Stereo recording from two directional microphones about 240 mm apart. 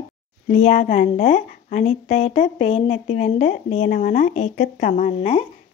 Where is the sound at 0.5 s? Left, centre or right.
Left.